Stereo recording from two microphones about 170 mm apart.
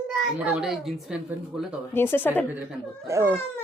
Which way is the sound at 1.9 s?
10° left (ahead or behind).